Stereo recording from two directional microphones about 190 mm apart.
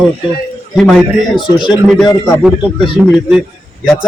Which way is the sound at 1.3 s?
25° left (ahead or behind).